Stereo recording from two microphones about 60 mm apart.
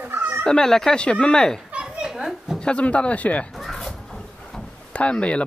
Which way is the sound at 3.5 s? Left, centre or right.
Centre.